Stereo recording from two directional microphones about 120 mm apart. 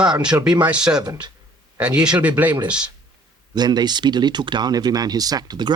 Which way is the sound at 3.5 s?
35° right (ahead or behind).